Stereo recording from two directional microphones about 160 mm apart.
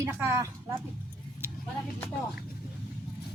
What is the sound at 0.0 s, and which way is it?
Speech, 15° right (ahead or behind).